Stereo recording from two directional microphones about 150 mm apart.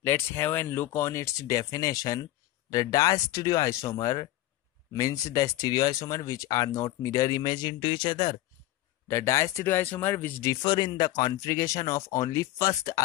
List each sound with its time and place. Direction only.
0.0 s speech: 15° left (ahead or behind); by 8.4 s 35° left (ahead or behind)
9.0 s speech: 20° left (ahead or behind)